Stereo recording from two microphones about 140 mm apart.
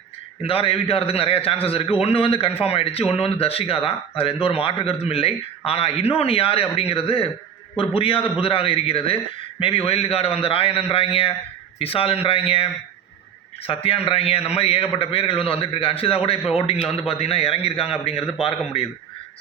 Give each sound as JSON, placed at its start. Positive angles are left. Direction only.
{"t": 0.4, "sound": "a man's voice", "side_deg": 40}
{"t": 13.7, "sound": "a man's voice", "side_deg": 40}